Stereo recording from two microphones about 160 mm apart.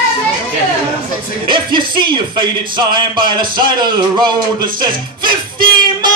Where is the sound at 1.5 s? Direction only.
30° right (ahead or behind).